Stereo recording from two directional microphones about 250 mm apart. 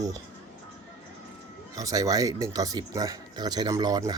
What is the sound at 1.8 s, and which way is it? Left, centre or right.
Speech, centre.